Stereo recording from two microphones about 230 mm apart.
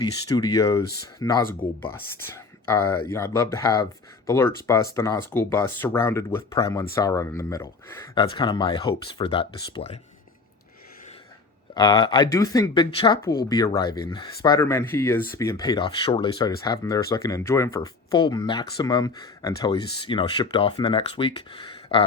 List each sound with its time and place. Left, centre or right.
0.0 s speech: centre
2.2 s a sound: centre
3.1 s speech: centre
11.7 s speech: centre